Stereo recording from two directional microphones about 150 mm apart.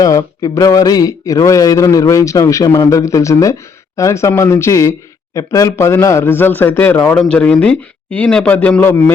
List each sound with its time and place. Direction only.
0.0 s a man's voice: 20° left (ahead or behind)